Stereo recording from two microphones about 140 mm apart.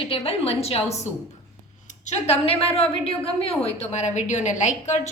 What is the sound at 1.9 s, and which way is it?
A woman's voice, 50° left (ahead or behind).